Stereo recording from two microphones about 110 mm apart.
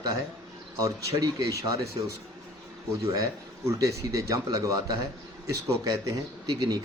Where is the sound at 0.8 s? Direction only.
30° right (ahead or behind).